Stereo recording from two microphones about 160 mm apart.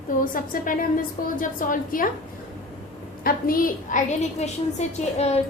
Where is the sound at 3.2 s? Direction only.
65° left (ahead or behind); by 5.4 s 40° left (ahead or behind).